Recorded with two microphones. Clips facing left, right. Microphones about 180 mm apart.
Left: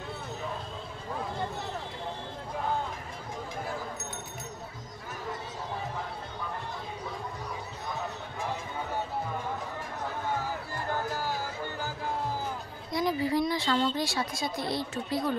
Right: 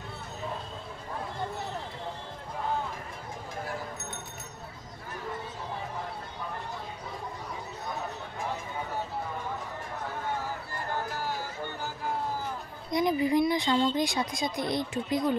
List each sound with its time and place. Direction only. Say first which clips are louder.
12.9 s speech: right 3 dB; 20° right (ahead or behind)